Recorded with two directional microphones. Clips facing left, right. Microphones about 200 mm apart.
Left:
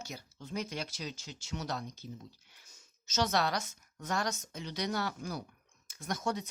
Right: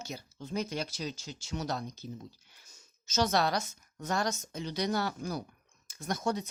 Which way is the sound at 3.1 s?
35° right (ahead or behind).